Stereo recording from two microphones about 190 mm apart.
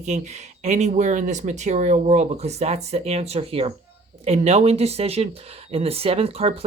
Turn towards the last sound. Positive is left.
turn(degrees=-30)  # may be behind; listen again after turning